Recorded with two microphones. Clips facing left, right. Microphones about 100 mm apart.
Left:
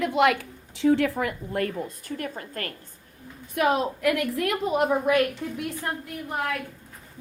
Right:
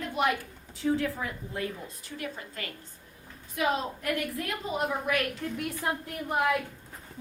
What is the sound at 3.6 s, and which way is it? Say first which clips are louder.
A woman's voice: left 6 dB; 65° left (ahead or behind).